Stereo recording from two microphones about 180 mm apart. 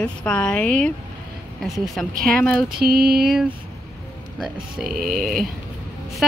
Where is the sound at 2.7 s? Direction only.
60° right (ahead or behind).